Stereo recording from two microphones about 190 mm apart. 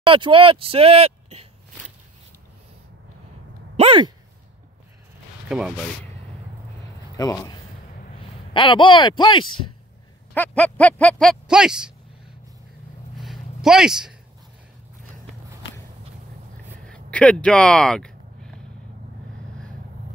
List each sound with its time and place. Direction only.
0.0 s speech: 25° right (ahead or behind)
3.7 s speech: 30° right (ahead or behind)
5.5 s speech: centre (ahead or behind)
7.2 s speech: 20° left (ahead or behind)
10.3 s speech: 10° left (ahead or behind)
13.2 s a sound: centre (ahead or behind)
16.8 s a sound: 5° left (ahead or behind)